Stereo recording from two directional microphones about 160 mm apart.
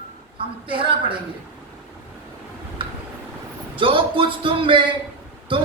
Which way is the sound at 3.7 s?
35° right (ahead or behind).